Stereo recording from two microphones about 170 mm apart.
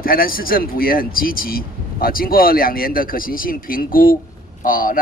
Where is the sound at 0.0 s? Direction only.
60° left (ahead or behind).